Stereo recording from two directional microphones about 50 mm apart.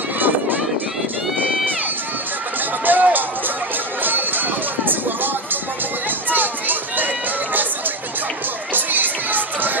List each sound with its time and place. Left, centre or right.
2.8 s run: right
4.0 s a sound: right
6.3 s music: right
8.7 s music: right